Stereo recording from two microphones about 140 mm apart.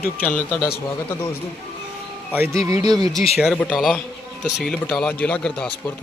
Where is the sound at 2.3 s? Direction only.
15° right (ahead or behind).